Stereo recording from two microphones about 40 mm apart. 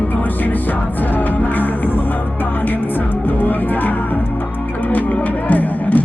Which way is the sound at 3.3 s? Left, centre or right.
Left.